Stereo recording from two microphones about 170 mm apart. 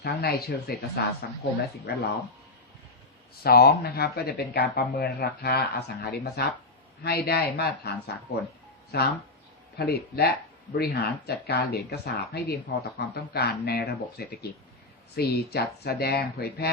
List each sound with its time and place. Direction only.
0.0 s speech: 70° left (ahead or behind)
1.9 s speech: 70° left (ahead or behind)
3.4 s speech: 70° left (ahead or behind)